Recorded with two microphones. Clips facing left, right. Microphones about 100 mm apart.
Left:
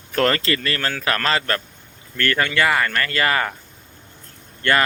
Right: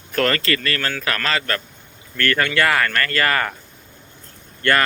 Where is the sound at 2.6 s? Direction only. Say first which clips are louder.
Even; 10° left (ahead or behind).